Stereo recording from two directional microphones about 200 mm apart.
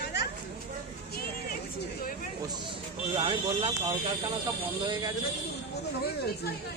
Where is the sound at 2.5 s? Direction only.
25° right (ahead or behind).